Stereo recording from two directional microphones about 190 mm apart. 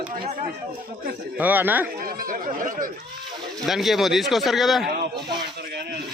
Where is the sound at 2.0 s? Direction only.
45° right (ahead or behind).